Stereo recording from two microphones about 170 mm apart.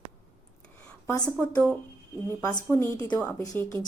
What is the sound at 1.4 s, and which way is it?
A woman's voice, 10° left (ahead or behind).